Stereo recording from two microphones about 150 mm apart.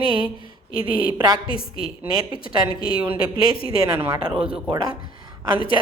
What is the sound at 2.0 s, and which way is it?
A woman's voice, 25° right (ahead or behind).